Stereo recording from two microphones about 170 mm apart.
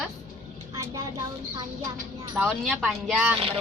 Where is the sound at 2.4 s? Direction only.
Centre (ahead or behind).